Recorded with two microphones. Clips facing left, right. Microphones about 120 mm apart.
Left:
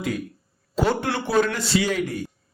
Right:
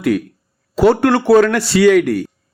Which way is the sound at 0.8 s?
65° right (ahead or behind).